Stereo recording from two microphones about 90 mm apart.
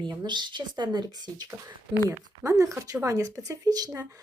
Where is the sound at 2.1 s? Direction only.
35° right (ahead or behind).